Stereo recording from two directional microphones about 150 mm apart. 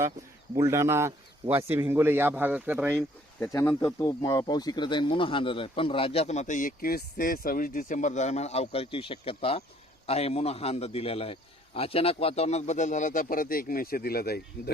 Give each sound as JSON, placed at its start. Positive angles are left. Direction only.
{"t": 0.5, "sound": "speech", "side_deg": -20}
{"t": 3.4, "sound": "a man's voice", "side_deg": 20}